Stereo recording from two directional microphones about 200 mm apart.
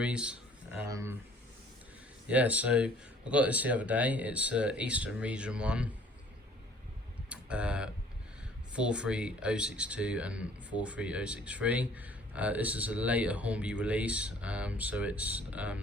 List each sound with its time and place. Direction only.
0.0 s speech: 5° right (ahead or behind)
2.2 s speech: 5° right (ahead or behind)
7.3 s tick-tock: 5° right (ahead or behind)
8.7 s speech: 5° right (ahead or behind)